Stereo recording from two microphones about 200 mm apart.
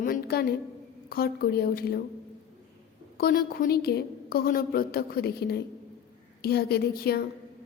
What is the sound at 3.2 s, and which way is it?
A woman's voice, 50° left (ahead or behind).